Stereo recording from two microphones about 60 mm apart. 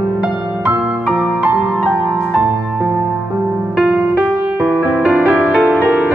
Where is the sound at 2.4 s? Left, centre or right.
Right.